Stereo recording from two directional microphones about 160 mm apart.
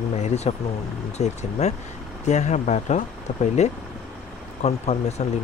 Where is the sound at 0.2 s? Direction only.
45° left (ahead or behind).